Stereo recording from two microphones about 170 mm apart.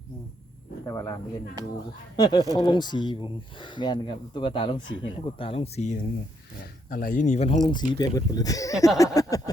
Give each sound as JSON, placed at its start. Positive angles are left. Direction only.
{"t": 0.9, "sound": "speech", "side_deg": 20}
{"t": 2.1, "sound": "speech", "side_deg": 25}
{"t": 6.9, "sound": "speech", "side_deg": 55}
{"t": 7.7, "sound": "speech", "side_deg": 25}